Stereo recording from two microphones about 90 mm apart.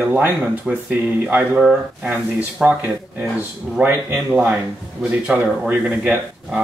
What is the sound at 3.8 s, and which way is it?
Speech, 25° right (ahead or behind).